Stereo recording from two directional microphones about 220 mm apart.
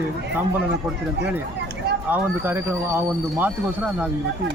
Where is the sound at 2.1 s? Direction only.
10° right (ahead or behind).